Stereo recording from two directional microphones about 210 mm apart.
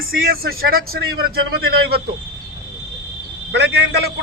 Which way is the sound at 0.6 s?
45° right (ahead or behind).